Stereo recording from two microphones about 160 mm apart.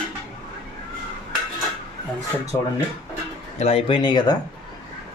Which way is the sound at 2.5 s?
25° left (ahead or behind).